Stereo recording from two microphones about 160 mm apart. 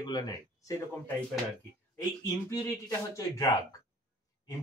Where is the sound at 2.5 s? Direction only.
20° left (ahead or behind).